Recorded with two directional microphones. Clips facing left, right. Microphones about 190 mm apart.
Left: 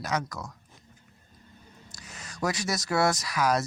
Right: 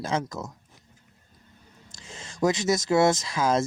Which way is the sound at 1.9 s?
25° right (ahead or behind).